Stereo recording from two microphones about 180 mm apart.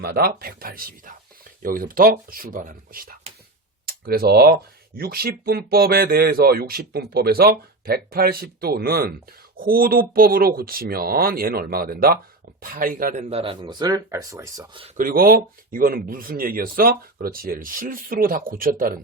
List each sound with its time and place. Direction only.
0.0 s speech: 60° right (ahead or behind)
13.3 s speech: 30° right (ahead or behind)
14.9 s speech: 50° right (ahead or behind)